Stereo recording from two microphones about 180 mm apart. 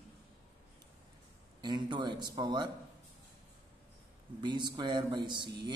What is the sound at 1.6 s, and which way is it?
Speech, 25° right (ahead or behind).